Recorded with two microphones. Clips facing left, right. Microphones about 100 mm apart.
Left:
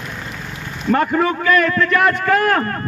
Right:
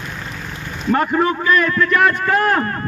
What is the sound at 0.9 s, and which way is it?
Speech, 25° right (ahead or behind).